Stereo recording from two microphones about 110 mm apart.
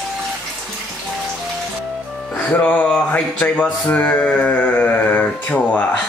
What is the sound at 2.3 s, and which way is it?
Music, 10° left (ahead or behind).